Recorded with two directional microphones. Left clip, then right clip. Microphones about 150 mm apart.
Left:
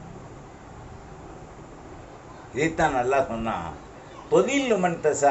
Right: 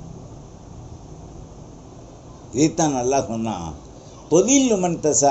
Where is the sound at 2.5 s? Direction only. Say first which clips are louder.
Right 3 dB; 55° right (ahead or behind).